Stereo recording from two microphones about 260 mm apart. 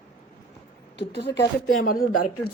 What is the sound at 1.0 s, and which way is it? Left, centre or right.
Speech, left.